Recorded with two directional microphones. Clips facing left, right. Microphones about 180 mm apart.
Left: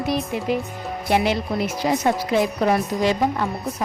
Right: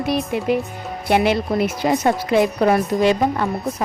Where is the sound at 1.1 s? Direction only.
60° right (ahead or behind).